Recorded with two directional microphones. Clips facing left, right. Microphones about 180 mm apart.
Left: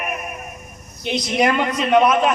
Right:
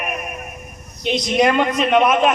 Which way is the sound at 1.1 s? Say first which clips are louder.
Right 2 dB; 20° right (ahead or behind).